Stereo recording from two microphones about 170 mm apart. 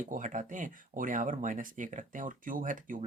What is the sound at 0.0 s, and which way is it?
Speech, 50° right (ahead or behind).